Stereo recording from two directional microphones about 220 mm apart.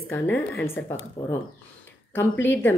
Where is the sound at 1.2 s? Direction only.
20° left (ahead or behind).